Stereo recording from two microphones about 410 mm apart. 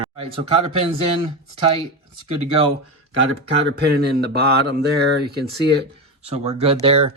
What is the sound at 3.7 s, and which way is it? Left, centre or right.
Dishes, right.